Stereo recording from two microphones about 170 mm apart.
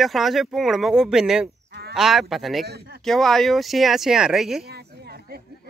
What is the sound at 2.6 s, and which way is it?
Speech, 70° right (ahead or behind).